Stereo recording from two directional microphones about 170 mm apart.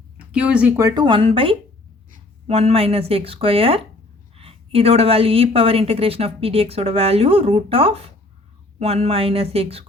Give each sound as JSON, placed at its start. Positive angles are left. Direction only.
{"t": 0.3, "sound": "speech", "side_deg": -5}
{"t": 0.8, "sound": "a woman's voice", "side_deg": -20}